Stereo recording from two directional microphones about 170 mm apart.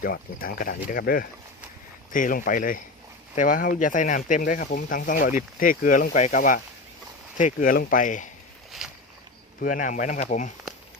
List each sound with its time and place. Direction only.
0.0 s speech: 60° left (ahead or behind)
8.8 s a sound: 5° right (ahead or behind)
9.6 s speech: 50° left (ahead or behind)